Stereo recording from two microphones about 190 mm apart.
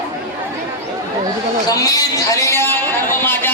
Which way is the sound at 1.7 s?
20° left (ahead or behind).